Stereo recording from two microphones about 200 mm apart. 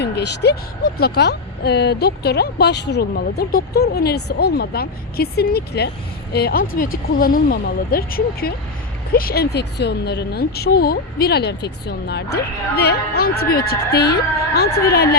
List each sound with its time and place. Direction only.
0.0 s speech: 60° left (ahead or behind)